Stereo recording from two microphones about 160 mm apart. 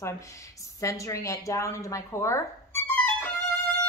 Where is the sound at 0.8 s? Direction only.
20° left (ahead or behind).